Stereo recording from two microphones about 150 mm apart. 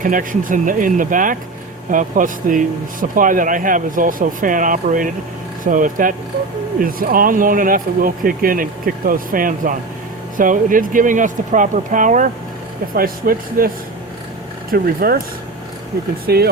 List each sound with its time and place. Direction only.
0.0 s speech: 65° right (ahead or behind)
12.9 s speech: 75° right (ahead or behind)
14.7 s speech: 75° right (ahead or behind)
16.2 s speech: 90° right